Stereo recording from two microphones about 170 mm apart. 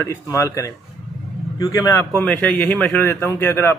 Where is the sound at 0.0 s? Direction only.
15° left (ahead or behind).